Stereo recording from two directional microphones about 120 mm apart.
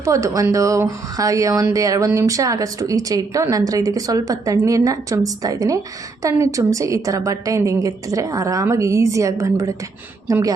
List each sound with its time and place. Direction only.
0.0 s a woman's voice: 25° right (ahead or behind)